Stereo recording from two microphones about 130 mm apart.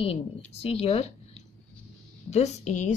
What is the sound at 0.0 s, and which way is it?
Speech, 50° left (ahead or behind).